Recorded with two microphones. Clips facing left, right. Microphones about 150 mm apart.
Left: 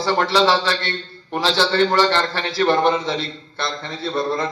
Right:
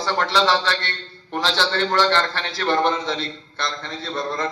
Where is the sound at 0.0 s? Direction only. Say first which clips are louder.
Left 3 dB; 5° left (ahead or behind).